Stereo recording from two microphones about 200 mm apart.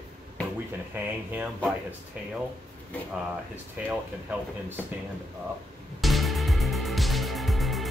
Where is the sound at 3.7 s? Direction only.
5° right (ahead or behind).